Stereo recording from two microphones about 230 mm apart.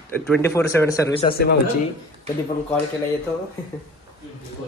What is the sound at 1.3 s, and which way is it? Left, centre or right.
Speech, left.